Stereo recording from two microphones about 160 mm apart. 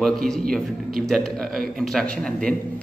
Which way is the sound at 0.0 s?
5° left (ahead or behind).